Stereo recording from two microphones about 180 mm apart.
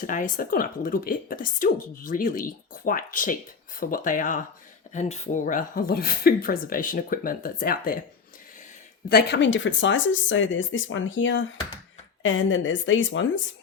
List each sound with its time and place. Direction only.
0.0 s speech: 45° left (ahead or behind)
9.0 s speech: 60° left (ahead or behind); by 13.3 s 90° left